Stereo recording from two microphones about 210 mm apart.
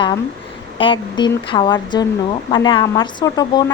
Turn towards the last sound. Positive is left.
turn(degrees=20)  # may be behind; listen again after turning